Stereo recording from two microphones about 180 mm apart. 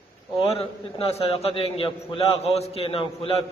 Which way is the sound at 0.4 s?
30° left (ahead or behind).